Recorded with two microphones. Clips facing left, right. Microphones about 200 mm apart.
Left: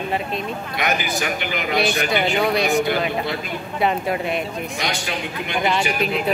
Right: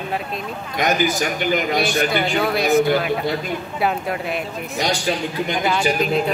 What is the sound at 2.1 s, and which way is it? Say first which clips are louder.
Speech: even; centre (ahead or behind).